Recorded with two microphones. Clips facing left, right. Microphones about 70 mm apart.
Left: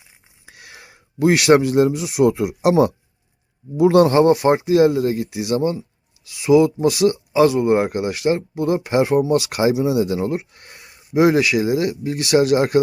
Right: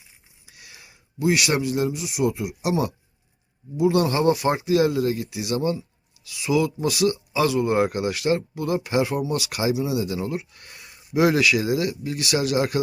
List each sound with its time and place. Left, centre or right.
0.5 s speech: left